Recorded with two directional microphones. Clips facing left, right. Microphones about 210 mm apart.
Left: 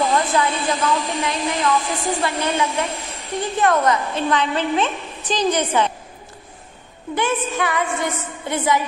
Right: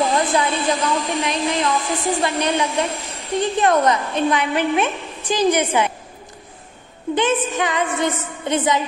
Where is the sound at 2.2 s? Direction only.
20° right (ahead or behind).